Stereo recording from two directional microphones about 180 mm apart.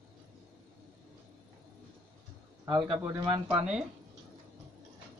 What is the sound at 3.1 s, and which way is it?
Speech, 20° right (ahead or behind).